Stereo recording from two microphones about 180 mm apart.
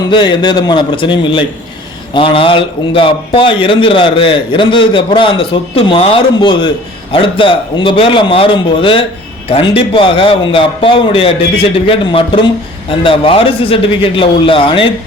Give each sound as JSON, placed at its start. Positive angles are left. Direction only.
{"t": 0.1, "sound": "a man's voice", "side_deg": 25}